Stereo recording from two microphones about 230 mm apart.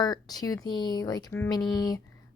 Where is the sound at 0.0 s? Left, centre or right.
Centre.